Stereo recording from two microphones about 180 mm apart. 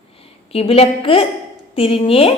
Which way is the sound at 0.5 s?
35° left (ahead or behind).